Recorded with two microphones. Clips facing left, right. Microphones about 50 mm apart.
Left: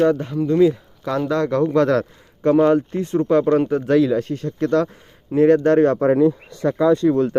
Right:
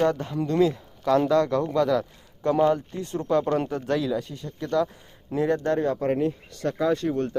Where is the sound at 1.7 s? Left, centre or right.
Left.